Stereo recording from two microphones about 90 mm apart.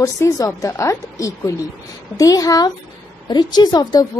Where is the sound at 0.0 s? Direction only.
35° left (ahead or behind).